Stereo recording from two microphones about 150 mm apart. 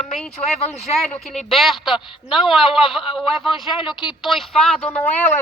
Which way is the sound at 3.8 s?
35° left (ahead or behind).